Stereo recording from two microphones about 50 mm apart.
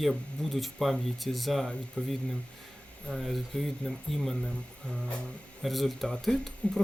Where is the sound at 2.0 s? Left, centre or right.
Centre.